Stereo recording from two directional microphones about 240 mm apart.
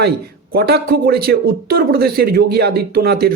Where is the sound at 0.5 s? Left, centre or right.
Right.